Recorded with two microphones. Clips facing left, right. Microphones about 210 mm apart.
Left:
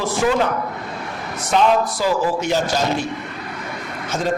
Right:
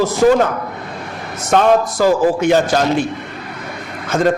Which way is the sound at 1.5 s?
50° right (ahead or behind).